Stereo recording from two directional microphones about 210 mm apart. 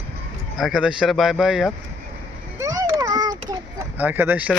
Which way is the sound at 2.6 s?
15° right (ahead or behind).